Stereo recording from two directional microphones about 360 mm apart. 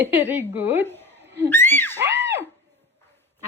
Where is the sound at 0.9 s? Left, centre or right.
Centre.